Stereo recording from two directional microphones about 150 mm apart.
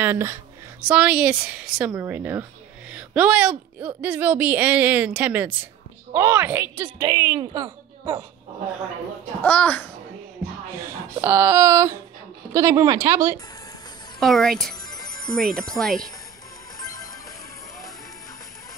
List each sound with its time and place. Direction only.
0.0 s a woman's voice: 15° right (ahead or behind)
9.4 s a child's voice: 10° left (ahead or behind)
10.7 s a woman's voice: 15° right (ahead or behind)
14.2 s speech: centre (ahead or behind)
14.9 s music: 25° left (ahead or behind)
15.3 s speech: 5° left (ahead or behind)
16.8 s music: 25° left (ahead or behind)